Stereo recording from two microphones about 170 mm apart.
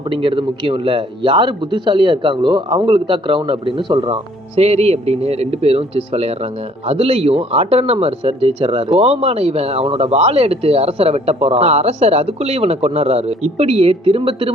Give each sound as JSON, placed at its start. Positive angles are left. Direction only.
{"t": 0.1, "sound": "speech", "side_deg": -30}